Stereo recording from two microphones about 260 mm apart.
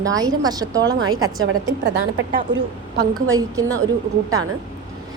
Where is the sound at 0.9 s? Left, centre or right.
Right.